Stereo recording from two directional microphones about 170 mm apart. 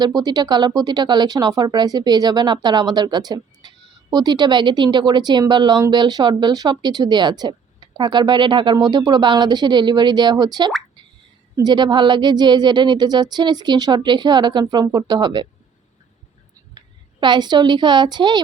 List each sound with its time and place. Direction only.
0.0 s speech: 25° right (ahead or behind)
16.7 s a woman's voice: 25° right (ahead or behind)